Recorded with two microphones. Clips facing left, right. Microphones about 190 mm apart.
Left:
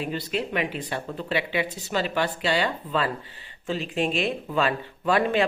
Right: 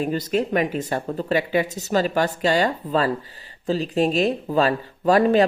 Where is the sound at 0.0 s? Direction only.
45° right (ahead or behind).